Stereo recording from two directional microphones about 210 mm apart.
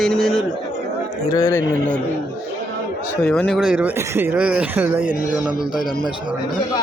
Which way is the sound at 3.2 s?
5° left (ahead or behind).